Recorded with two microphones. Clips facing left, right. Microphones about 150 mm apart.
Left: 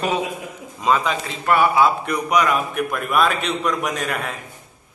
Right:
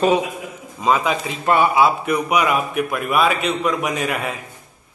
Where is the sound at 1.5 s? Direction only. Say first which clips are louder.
Right 1 dB; 20° right (ahead or behind).